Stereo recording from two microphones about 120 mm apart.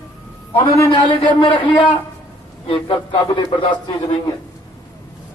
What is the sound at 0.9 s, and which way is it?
Speech, 45° left (ahead or behind).